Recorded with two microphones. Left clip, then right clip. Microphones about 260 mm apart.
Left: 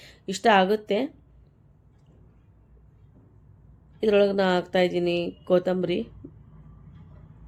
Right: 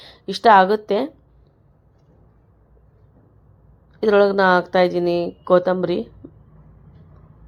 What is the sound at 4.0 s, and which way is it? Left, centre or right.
Speech, centre.